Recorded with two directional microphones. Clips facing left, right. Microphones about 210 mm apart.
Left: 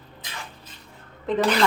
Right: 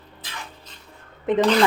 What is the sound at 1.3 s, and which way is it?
Speech, 20° right (ahead or behind).